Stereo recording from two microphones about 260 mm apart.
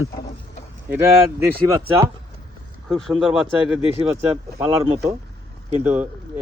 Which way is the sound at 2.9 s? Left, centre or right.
Centre.